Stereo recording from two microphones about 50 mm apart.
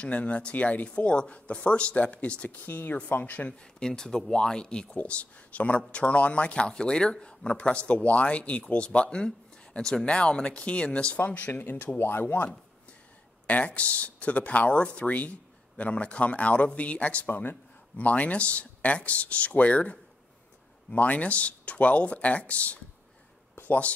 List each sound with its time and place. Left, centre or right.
0.0 s speech: left
2.6 s speech: left
3.8 s speech: centre
6.5 s speech: centre
11.1 s speech: left
13.5 s speech: left
17.3 s speech: left
23.5 s a sound: left